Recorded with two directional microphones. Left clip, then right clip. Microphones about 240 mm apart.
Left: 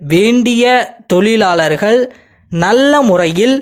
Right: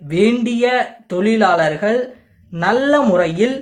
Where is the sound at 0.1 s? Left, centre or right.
Left.